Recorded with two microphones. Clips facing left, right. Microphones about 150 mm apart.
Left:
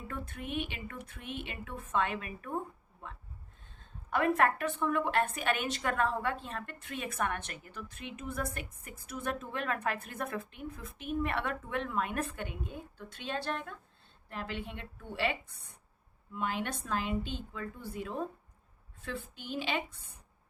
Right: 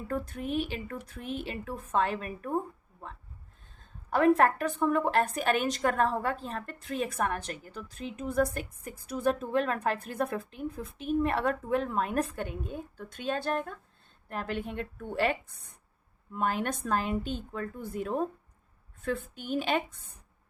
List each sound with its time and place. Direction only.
0.1 s a woman's voice: 40° right (ahead or behind)
4.1 s a woman's voice: 35° right (ahead or behind)